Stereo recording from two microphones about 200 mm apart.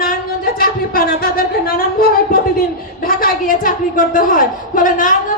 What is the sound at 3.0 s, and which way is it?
A woman's voice, 45° left (ahead or behind).